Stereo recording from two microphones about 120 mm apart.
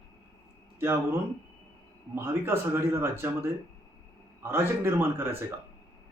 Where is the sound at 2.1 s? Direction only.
20° right (ahead or behind).